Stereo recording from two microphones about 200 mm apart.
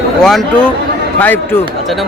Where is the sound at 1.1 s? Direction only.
10° left (ahead or behind).